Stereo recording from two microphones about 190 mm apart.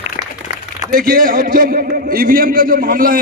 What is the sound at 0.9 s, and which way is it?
A man's voice, 50° right (ahead or behind).